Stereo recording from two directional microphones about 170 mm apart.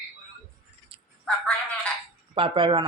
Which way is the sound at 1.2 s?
5° left (ahead or behind).